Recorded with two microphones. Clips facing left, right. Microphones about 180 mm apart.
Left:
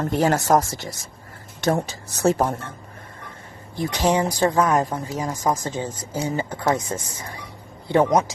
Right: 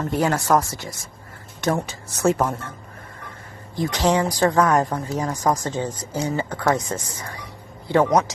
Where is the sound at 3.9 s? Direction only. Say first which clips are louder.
Even; 15° left (ahead or behind).